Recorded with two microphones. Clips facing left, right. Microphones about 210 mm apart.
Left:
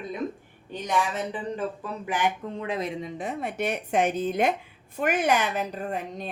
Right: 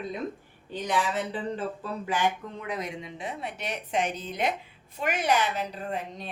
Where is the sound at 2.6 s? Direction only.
30° left (ahead or behind).